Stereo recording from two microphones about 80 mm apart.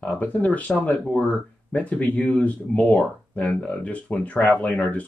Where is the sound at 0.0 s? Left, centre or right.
Centre.